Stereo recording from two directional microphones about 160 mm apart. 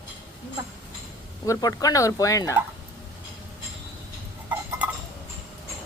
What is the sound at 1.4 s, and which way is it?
Speech, 25° left (ahead or behind).